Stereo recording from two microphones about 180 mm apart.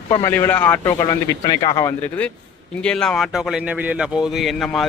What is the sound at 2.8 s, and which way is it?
Speech, 5° left (ahead or behind).